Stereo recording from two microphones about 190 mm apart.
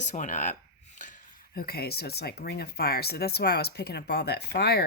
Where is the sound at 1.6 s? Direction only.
55° left (ahead or behind).